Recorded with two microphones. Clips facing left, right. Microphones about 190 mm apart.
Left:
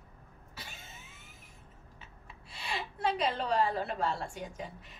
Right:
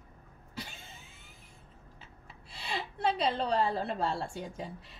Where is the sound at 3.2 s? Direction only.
30° right (ahead or behind).